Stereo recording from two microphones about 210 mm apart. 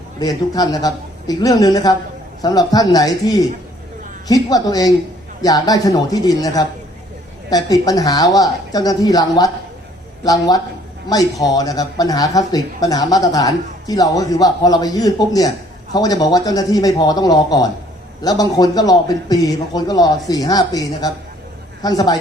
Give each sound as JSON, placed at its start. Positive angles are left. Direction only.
{"t": 0.2, "sound": "a man's voice", "side_deg": 20}